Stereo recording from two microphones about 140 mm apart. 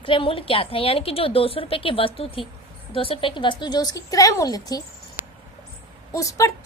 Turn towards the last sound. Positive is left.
turn(degrees=25)  # may be behind; listen again after turning